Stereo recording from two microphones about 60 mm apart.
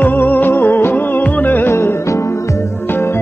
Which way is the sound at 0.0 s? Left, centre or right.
Left.